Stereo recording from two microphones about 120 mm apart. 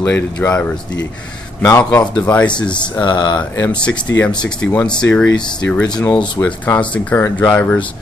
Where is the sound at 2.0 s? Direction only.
35° left (ahead or behind).